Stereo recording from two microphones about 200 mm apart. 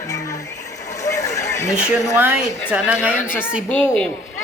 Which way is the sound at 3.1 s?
10° left (ahead or behind).